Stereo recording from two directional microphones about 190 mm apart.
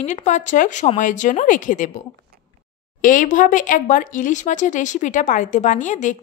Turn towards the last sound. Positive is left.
turn(degrees=40)  # may be behind; listen again after turning